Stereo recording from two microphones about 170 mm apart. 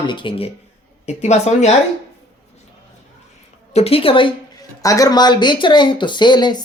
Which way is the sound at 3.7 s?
35° left (ahead or behind).